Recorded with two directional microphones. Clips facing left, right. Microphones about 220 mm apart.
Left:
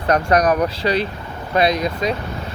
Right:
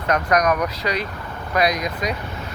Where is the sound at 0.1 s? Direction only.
30° left (ahead or behind).